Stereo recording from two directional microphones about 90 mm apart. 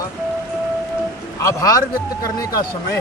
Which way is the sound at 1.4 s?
35° left (ahead or behind).